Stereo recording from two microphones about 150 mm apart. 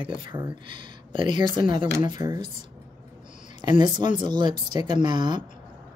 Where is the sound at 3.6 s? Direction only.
25° right (ahead or behind).